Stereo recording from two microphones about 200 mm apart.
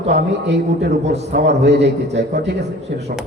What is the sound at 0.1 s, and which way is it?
A man's voice, 55° right (ahead or behind).